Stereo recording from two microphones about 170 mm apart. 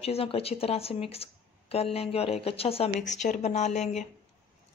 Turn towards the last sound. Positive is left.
turn(degrees=40)  # may be behind; listen again after turning